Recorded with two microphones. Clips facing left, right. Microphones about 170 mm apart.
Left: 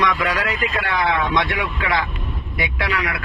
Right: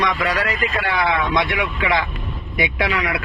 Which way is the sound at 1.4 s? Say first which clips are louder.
Right 2 dB; 20° right (ahead or behind).